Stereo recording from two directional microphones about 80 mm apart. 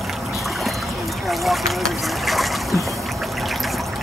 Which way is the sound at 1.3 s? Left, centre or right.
Centre.